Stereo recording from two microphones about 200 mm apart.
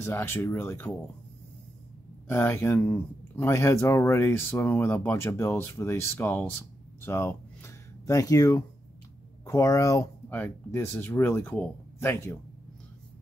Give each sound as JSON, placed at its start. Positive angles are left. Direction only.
{"t": 0.0, "sound": "speech", "side_deg": 10}
{"t": 2.2, "sound": "speech", "side_deg": 10}
{"t": 7.0, "sound": "a sound", "side_deg": 10}
{"t": 9.4, "sound": "speech", "side_deg": 15}